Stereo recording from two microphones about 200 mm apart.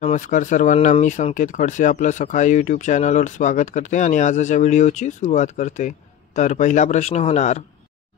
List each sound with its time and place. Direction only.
0.0 s speech: 40° left (ahead or behind)